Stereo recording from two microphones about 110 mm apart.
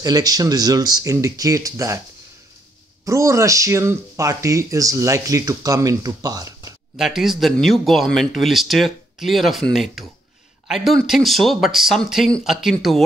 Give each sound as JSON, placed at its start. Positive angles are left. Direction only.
{"t": 0.0, "sound": "speech", "side_deg": -35}
{"t": 3.1, "sound": "speech", "side_deg": -30}
{"t": 7.0, "sound": "speech", "side_deg": -5}